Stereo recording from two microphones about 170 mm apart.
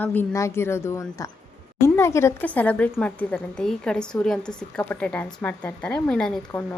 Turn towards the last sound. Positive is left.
turn(degrees=10)  # may be behind; listen again after turning